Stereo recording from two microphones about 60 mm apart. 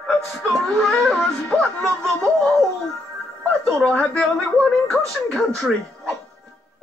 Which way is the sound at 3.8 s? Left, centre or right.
Centre.